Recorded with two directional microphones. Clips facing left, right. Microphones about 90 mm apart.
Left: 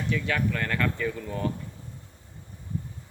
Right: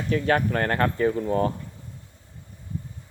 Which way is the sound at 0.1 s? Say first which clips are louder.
Right 6 dB; 45° right (ahead or behind).